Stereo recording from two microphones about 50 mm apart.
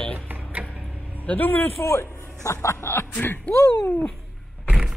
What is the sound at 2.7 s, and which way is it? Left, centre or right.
Speech, left.